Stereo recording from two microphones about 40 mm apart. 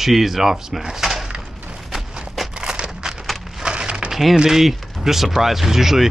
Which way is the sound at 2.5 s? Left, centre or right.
Right.